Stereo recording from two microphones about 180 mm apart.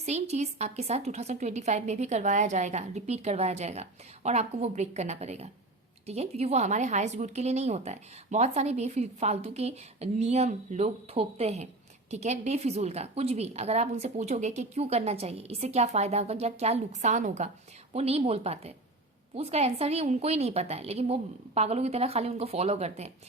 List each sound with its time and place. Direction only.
0.0 s speech: 35° right (ahead or behind)